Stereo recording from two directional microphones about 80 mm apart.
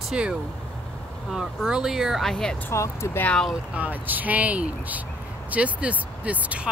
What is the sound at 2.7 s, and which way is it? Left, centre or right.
Speech, left.